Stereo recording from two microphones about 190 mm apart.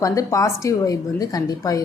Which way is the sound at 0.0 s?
15° left (ahead or behind).